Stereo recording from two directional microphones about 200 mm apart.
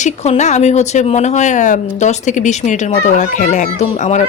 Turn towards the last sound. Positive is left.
turn(degrees=35)  # may be behind; listen again after turning